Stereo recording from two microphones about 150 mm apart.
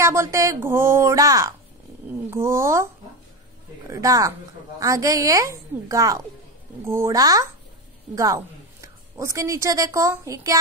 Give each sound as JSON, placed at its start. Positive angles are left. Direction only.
{"t": 0.0, "sound": "a woman's voice", "side_deg": -20}